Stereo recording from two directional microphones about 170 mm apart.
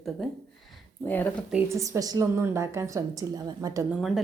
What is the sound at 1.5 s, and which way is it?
Speech, 15° right (ahead or behind).